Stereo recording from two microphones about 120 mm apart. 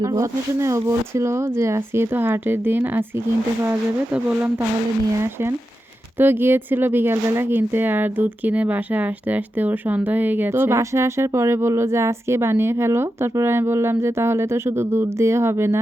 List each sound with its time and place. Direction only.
0.0 s speech: 25° right (ahead or behind)